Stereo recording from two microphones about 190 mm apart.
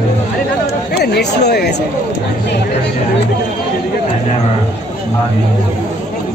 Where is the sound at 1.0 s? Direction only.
60° left (ahead or behind).